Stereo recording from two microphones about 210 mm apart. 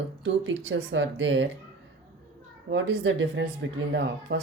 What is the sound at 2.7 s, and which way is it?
Speech, 60° right (ahead or behind).